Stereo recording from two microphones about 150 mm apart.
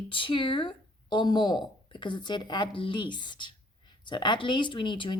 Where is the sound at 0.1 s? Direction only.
35° left (ahead or behind).